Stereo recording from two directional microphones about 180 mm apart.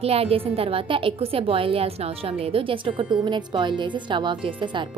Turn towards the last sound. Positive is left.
turn(degrees=-25)  # may be behind; listen again after turning